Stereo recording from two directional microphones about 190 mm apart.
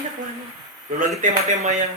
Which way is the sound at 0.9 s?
45° right (ahead or behind).